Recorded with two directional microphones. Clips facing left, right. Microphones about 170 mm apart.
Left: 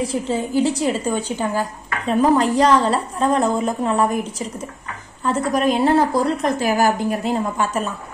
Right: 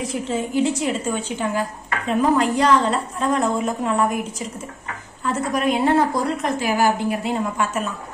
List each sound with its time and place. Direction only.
0.0 s a woman's voice: 30° left (ahead or behind)